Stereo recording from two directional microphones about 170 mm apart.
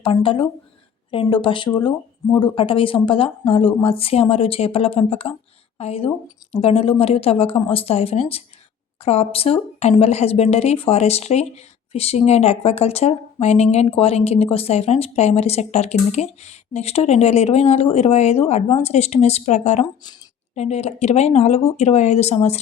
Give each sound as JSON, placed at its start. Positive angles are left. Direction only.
{"t": 0.0, "sound": "speech", "side_deg": 30}